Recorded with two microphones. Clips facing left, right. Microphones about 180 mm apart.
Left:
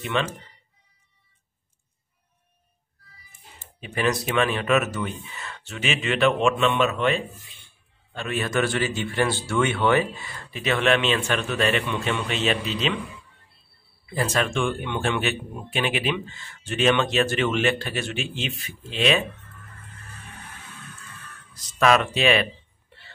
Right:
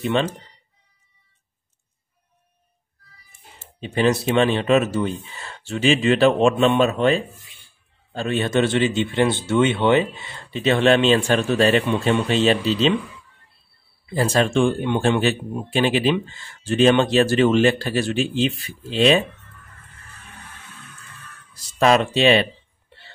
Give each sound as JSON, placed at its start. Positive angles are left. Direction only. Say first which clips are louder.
{"t": 0.0, "sound": "speech", "louder": "right 5 dB", "side_deg": -30}
{"t": 3.8, "sound": "a man's voice", "louder": "right 5 dB", "side_deg": -30}
{"t": 14.0, "sound": "speech", "louder": "right 5 dB", "side_deg": -30}
{"t": 21.5, "sound": "a man's voice", "louder": "right 3 dB", "side_deg": -30}